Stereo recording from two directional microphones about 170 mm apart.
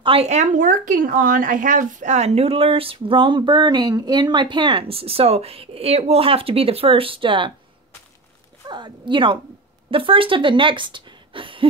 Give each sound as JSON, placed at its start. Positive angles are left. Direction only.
{"t": 0.0, "sound": "speech", "side_deg": -35}
{"t": 8.6, "sound": "speech", "side_deg": -25}